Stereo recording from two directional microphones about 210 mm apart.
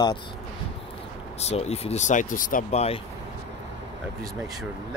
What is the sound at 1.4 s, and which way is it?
Speech, 30° left (ahead or behind).